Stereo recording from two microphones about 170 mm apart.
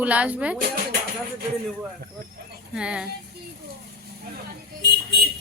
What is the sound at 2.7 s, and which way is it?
Speech, 5° right (ahead or behind).